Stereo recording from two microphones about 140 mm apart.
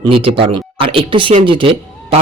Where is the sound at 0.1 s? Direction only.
40° right (ahead or behind).